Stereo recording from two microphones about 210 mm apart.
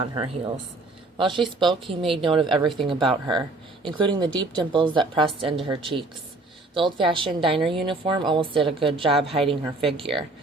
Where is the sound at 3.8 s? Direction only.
25° right (ahead or behind).